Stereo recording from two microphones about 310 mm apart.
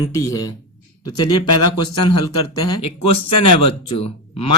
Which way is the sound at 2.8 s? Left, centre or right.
Left.